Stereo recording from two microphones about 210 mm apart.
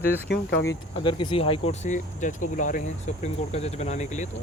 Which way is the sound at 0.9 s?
25° left (ahead or behind).